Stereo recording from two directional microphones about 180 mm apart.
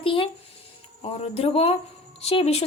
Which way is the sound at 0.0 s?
30° left (ahead or behind).